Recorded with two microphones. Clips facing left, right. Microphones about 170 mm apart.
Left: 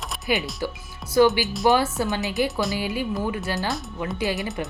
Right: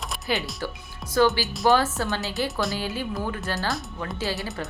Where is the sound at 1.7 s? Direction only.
10° left (ahead or behind).